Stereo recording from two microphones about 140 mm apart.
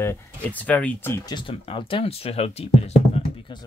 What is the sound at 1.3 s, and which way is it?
Speech, 35° left (ahead or behind).